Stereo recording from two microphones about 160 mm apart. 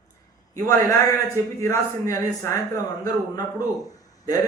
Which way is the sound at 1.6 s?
20° left (ahead or behind).